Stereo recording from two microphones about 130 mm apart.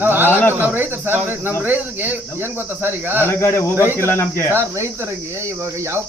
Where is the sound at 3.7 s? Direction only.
20° right (ahead or behind).